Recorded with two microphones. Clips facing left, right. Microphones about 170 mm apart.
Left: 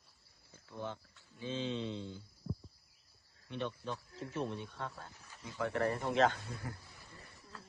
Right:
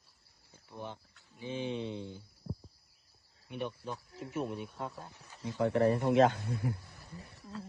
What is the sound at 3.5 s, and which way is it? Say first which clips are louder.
Speech: right 1 dB; 10° right (ahead or behind).